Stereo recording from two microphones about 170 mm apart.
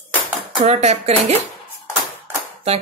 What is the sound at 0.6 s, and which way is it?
Speech, 40° right (ahead or behind).